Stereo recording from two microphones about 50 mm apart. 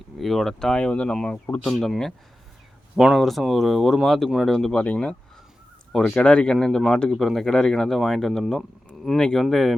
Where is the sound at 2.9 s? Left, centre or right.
Centre.